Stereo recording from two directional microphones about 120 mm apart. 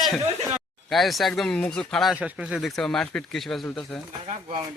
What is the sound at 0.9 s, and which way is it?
Speech, centre (ahead or behind).